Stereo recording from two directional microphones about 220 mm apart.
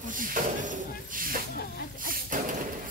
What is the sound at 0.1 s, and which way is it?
Snake, 40° right (ahead or behind).